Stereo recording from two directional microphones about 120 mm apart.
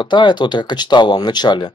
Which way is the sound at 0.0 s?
40° left (ahead or behind).